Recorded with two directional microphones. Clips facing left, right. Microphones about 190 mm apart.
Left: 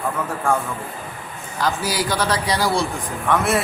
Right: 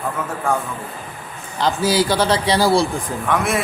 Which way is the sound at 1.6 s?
25° right (ahead or behind).